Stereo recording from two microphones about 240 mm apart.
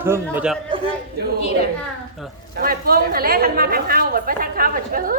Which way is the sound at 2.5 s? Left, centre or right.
Right.